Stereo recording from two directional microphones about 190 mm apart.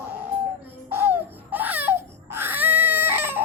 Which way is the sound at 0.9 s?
10° right (ahead or behind).